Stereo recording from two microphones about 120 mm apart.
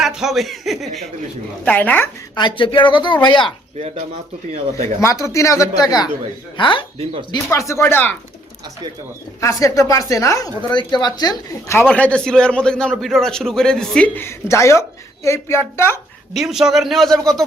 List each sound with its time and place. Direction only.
0.0 s speech: 5° right (ahead or behind)
1.6 s a man's voice: 10° left (ahead or behind)
2.3 s speech: 40° left (ahead or behind)
3.8 s speech: 60° right (ahead or behind)
4.9 s a woman's voice: 25° left (ahead or behind)
6.6 s speech: 45° left (ahead or behind)
7.0 s speech: 50° right (ahead or behind)
7.3 s a woman's voice: 25° left (ahead or behind)
9.4 s a woman's voice: 25° left (ahead or behind)
10.7 s speech: 35° left (ahead or behind)
11.8 s a man's voice: 10° left (ahead or behind)
14.2 s a woman's voice: 20° left (ahead or behind)
16.3 s speech: 5° right (ahead or behind)